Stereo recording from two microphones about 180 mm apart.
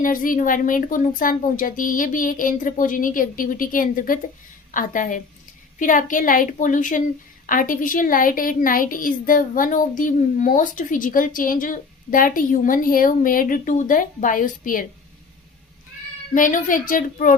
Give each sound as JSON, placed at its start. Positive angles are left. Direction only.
{"t": 0.0, "sound": "speech", "side_deg": 50}
{"t": 16.3, "sound": "speech", "side_deg": 45}